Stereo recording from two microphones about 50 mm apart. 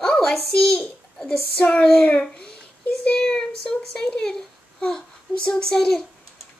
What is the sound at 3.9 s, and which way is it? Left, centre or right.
A child's voice, centre.